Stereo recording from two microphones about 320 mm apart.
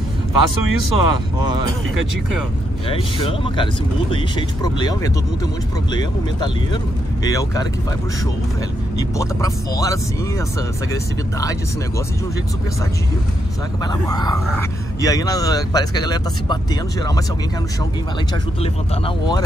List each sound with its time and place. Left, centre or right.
0.3 s speech: right
2.9 s speech: centre
9.2 s speech: centre
14.0 s speech: centre
18.6 s speech: centre